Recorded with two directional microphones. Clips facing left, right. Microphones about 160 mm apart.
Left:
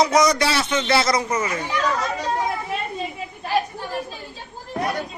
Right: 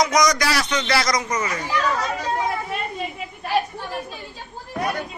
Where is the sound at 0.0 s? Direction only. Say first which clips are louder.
Left 2 dB; 30° left (ahead or behind).